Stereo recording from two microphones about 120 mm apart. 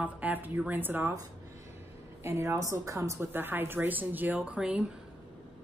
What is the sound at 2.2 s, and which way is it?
Speech, 25° right (ahead or behind).